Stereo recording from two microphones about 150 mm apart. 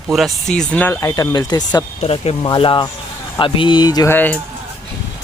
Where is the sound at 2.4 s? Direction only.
30° left (ahead or behind).